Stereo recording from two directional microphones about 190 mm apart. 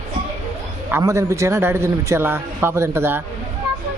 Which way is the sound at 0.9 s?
15° right (ahead or behind).